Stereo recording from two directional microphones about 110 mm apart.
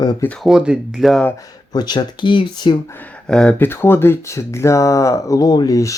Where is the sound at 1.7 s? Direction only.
40° left (ahead or behind).